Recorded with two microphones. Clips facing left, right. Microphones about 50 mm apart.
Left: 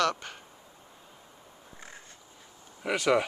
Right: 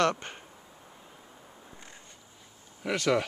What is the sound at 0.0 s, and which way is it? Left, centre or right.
Speech, right.